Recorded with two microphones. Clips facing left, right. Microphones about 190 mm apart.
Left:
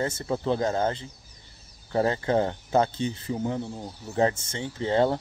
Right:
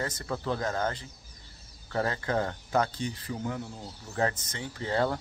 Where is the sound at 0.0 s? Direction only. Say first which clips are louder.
Left 6 dB; 25° left (ahead or behind).